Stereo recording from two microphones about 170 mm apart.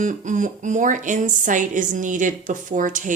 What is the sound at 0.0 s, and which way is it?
Speech, 45° right (ahead or behind).